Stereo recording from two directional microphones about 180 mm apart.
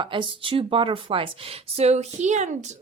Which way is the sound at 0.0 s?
30° right (ahead or behind).